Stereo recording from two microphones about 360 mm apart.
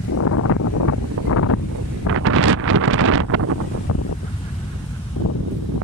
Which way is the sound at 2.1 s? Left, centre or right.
Right.